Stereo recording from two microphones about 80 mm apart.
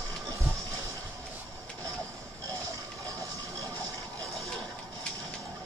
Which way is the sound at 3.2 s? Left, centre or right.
Right.